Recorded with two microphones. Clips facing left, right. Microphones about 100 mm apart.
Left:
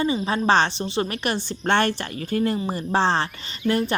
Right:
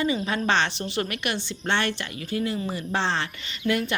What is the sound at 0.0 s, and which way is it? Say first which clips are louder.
A woman's voice: left 3 dB; 30° left (ahead or behind).